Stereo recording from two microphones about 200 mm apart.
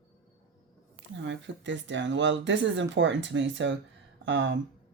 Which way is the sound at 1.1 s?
65° right (ahead or behind).